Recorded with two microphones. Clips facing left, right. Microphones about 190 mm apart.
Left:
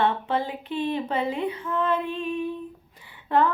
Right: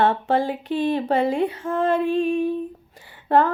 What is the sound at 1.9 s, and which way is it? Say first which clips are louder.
Female singing: right 7 dB; 90° right.